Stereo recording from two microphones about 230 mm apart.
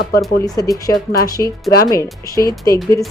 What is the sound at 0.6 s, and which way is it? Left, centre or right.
Speech, centre.